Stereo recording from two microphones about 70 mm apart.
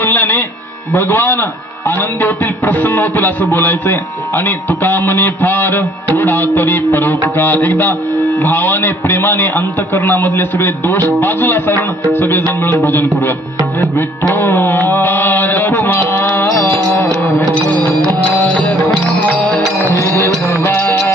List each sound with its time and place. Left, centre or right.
0.0 s a sound: left
0.9 s a man's voice: left
14.3 s mantra: left
17.0 s music: left
19.9 s music: left